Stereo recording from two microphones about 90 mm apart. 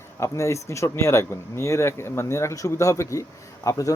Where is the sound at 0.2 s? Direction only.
35° left (ahead or behind).